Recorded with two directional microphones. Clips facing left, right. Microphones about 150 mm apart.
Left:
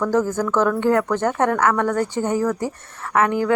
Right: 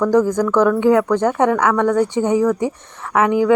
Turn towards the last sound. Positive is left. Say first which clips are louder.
# right 4 dB
turn(degrees=-15)  # may be behind; listen again after turning